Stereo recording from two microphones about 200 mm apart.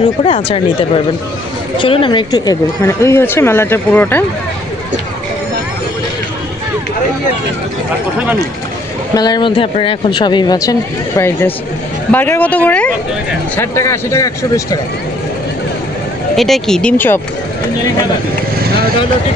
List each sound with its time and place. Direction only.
0.2 s speech: 30° left (ahead or behind); by 4.2 s 10° left (ahead or behind)
9.1 s speech: 20° left (ahead or behind)
16.3 s speech: centre (ahead or behind)